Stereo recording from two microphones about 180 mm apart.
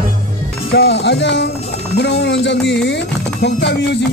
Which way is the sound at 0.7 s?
70° left (ahead or behind).